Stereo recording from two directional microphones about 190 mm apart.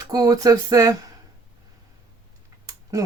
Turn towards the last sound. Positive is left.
turn(degrees=-15)  # may be behind; listen again after turning